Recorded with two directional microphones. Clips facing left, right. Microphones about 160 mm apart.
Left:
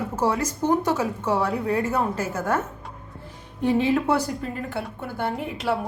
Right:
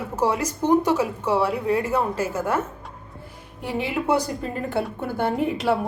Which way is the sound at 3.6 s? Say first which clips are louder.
Left 5 dB; 15° right (ahead or behind).